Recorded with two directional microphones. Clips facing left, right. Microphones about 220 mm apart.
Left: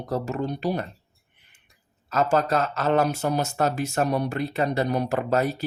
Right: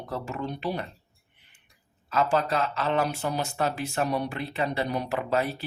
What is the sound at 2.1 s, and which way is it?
Speech, 45° left (ahead or behind).